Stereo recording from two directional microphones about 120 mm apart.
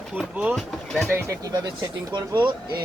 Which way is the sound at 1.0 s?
20° right (ahead or behind).